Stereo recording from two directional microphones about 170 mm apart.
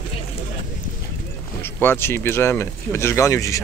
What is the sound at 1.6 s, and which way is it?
Speech, 15° left (ahead or behind).